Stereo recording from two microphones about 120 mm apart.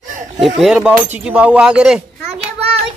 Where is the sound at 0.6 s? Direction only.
5° right (ahead or behind).